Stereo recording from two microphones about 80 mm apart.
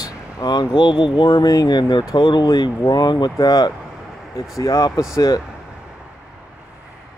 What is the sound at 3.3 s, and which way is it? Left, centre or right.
Speech, left.